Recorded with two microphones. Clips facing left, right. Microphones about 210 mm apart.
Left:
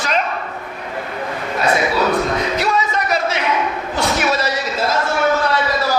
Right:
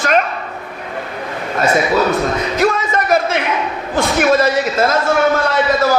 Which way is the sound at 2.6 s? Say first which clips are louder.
Right 4 dB; 50° right (ahead or behind).